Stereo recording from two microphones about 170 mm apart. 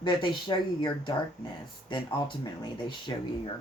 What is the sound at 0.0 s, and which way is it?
Speech, 30° left (ahead or behind).